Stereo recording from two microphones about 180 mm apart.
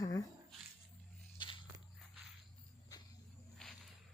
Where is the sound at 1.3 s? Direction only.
25° left (ahead or behind).